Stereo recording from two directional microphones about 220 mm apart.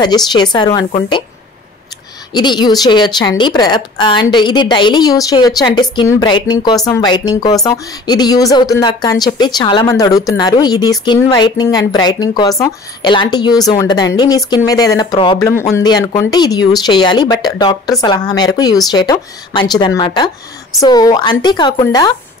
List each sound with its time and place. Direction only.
0.0 s a woman's voice: 20° left (ahead or behind)
2.3 s a woman's voice: 20° left (ahead or behind)